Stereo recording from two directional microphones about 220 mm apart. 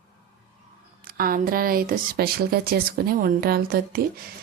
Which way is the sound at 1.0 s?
40° right (ahead or behind).